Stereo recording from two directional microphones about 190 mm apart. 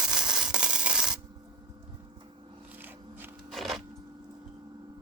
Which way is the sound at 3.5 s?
Centre (ahead or behind).